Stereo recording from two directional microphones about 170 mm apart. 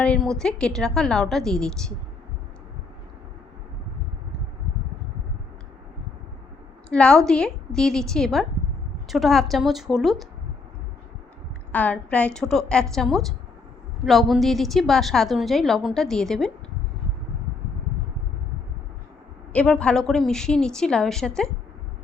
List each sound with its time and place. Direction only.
0.0 s a woman's voice: 5° left (ahead or behind)
6.9 s a woman's voice: 5° left (ahead or behind)
11.7 s a woman's voice: 10° left (ahead or behind)
19.5 s a woman's voice: 5° left (ahead or behind)